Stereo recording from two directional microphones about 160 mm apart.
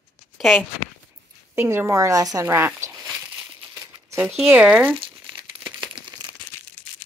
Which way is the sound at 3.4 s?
15° right (ahead or behind).